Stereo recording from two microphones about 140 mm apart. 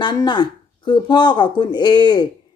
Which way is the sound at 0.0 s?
30° left (ahead or behind).